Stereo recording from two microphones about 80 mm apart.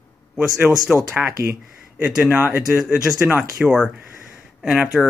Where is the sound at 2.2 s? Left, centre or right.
Centre.